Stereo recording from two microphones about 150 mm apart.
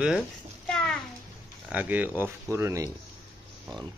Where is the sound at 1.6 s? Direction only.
10° right (ahead or behind).